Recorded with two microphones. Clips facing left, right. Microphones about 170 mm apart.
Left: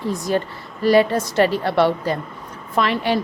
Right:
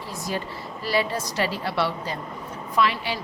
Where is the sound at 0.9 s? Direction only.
55° left (ahead or behind).